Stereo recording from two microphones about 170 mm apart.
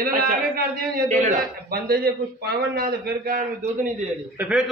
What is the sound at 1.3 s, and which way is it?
A man's voice, 65° right (ahead or behind).